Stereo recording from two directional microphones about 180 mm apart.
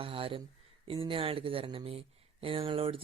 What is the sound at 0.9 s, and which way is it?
Speech, 30° right (ahead or behind).